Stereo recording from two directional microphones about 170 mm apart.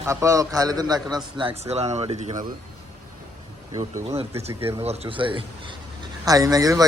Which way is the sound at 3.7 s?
20° right (ahead or behind).